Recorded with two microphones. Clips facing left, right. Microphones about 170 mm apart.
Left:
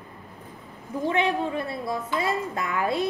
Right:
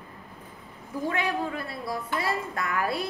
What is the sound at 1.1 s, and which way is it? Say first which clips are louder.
A woman's voice: left 5 dB; 20° left (ahead or behind).